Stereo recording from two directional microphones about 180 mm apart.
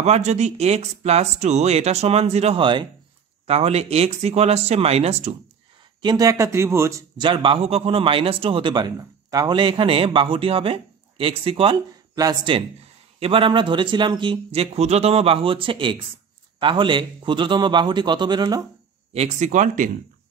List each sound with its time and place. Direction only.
0.0 s speech: 40° right (ahead or behind)
6.0 s a man's voice: 20° right (ahead or behind)
19.1 s speech: 40° right (ahead or behind)